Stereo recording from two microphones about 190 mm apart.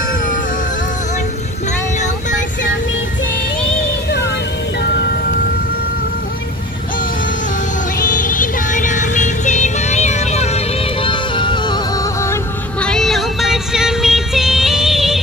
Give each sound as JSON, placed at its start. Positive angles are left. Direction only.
{"t": 8.0, "sound": "music", "side_deg": 45}
{"t": 12.8, "sound": "music", "side_deg": 0}